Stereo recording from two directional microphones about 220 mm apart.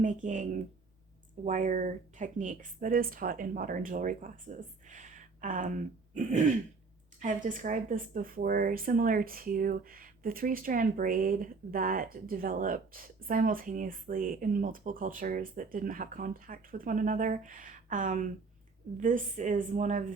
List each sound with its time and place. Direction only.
0.0 s speech: 35° right (ahead or behind)
1.5 s speech: 35° right (ahead or behind)